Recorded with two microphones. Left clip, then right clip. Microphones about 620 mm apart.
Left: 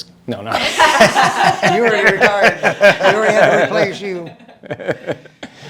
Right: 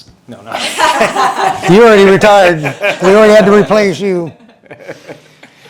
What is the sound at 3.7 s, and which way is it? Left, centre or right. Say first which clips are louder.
Speech: right 7 dB; right.